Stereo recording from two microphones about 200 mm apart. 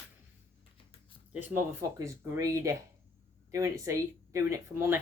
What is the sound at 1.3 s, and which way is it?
Speech, 10° right (ahead or behind).